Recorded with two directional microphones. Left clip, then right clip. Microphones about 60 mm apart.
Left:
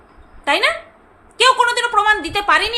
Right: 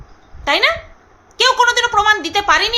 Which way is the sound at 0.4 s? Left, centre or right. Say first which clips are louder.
Right 2 dB; right.